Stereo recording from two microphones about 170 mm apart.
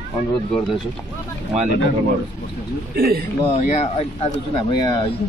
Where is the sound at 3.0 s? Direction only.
65° right (ahead or behind).